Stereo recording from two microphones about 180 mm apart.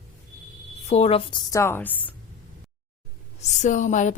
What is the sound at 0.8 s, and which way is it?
A woman's voice, 35° left (ahead or behind).